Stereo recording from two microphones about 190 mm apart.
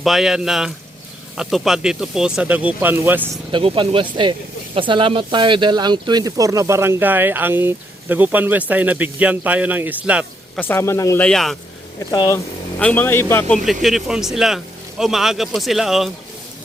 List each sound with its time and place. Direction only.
0.0 s speech: centre (ahead or behind)
3.5 s speech: 30° right (ahead or behind); by 10.6 s 5° right (ahead or behind)
10.6 s speech: 10° left (ahead or behind)
11.9 s speech: 20° left (ahead or behind)
12.8 s speech: 10° left (ahead or behind)
13.8 s speech: centre (ahead or behind)